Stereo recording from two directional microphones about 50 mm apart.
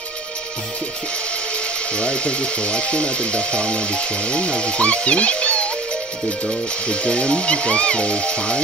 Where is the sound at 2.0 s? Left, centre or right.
Left.